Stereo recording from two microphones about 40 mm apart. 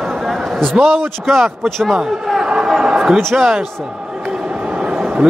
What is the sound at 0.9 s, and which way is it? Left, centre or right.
Speech, centre.